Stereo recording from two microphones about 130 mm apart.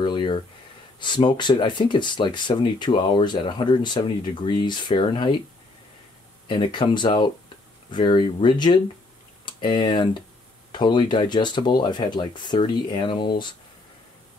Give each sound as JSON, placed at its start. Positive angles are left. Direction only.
{"t": 0.0, "sound": "a sound", "side_deg": 35}
{"t": 0.9, "sound": "speech", "side_deg": 35}
{"t": 6.4, "sound": "speech", "side_deg": 40}